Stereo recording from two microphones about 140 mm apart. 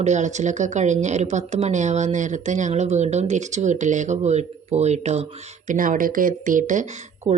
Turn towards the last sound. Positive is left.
turn(degrees=-65)  # may be behind; listen again after turning